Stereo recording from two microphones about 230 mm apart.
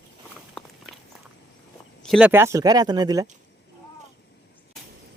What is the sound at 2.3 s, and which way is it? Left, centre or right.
Speech, centre.